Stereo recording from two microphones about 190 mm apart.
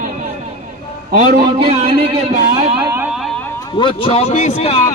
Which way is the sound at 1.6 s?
30° right (ahead or behind).